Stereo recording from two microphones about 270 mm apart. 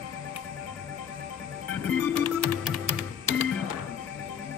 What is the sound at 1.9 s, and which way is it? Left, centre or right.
Music, centre.